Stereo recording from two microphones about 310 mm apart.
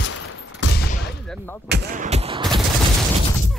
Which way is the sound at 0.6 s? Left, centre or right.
Left.